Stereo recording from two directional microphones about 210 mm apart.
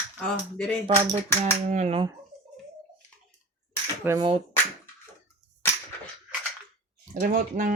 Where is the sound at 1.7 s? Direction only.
30° right (ahead or behind).